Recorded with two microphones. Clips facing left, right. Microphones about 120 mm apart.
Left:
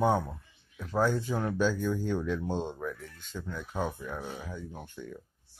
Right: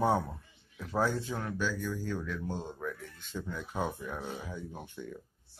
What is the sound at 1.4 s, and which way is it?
Speech, 30° left (ahead or behind).